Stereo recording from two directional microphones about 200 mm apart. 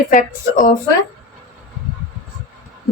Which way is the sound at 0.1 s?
40° left (ahead or behind).